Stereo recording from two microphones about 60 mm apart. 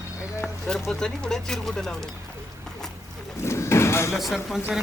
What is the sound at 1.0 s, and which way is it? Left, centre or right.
Speech, centre.